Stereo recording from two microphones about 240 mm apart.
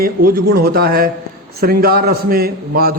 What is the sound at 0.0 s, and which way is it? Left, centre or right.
A man's voice, right.